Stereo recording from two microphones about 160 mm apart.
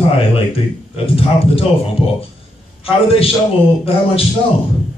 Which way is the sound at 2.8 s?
35° left (ahead or behind).